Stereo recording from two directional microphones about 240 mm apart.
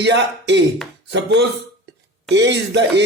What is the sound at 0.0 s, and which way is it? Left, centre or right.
Speech, right.